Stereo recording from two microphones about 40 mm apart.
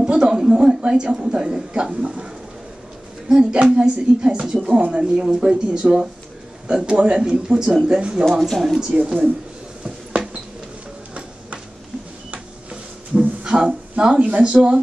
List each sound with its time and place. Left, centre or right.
0.0 s a sound: right
0.5 s a woman's voice: right
8.3 s speech: centre
8.6 s speech: centre
9.8 s a sound: right
13.1 s speech: right